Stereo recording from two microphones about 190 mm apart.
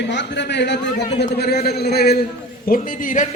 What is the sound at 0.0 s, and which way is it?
A man's voice, 65° left (ahead or behind).